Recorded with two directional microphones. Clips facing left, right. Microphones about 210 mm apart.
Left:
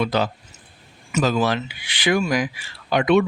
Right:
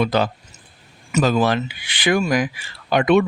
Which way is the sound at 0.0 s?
50° right (ahead or behind).